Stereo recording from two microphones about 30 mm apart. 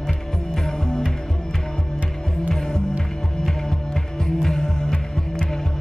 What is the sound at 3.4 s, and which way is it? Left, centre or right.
Music, centre.